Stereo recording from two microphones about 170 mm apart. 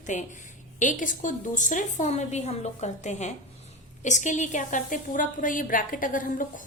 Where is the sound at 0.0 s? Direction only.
45° left (ahead or behind).